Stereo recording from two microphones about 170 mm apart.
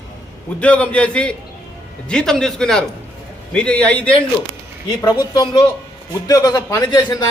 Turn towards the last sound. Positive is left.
turn(degrees=25)  # may be behind; listen again after turning